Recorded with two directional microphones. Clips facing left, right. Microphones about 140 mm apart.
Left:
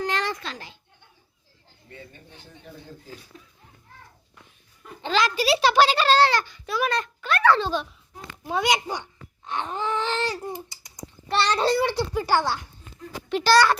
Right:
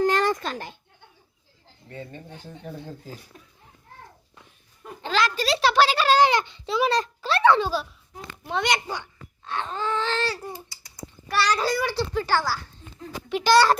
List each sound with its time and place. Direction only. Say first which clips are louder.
0.0 s a sound: right 6 dB; 45° right (ahead or behind)
1.9 s speech: right 7 dB; 40° right (ahead or behind)
5.0 s a sound: left 1 dB; centre (ahead or behind)
5.3 s a child's voice: left 2 dB; 5° left (ahead or behind); by 7.6 s 25° right (ahead or behind)
7.6 s a child's voice: even; 5° right (ahead or behind)
8.4 s a child's voice: left 2 dB; 5° left (ahead or behind)
8.9 s speech: left 1 dB; 15° left (ahead or behind)
10.7 s typing: even; 20° left (ahead or behind)
12.1 s a child's voice: left 1 dB; 15° left (ahead or behind)
13.3 s a child's voice: even; 15° right (ahead or behind)